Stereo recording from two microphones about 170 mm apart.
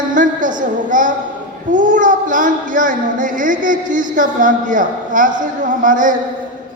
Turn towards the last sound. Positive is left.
turn(degrees=-50)  # may be behind; listen again after turning